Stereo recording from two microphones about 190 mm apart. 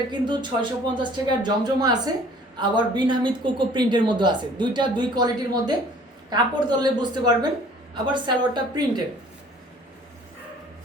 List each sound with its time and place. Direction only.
0.1 s speech: 25° right (ahead or behind)